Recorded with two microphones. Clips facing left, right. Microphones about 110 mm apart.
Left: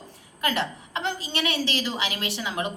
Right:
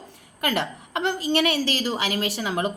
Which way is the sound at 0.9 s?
50° right (ahead or behind).